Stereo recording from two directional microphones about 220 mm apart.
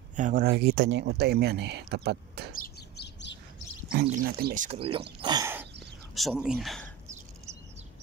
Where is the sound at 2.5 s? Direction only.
45° left (ahead or behind).